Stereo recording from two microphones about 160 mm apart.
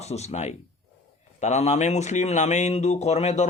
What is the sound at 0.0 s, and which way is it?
A man's voice, 40° left (ahead or behind).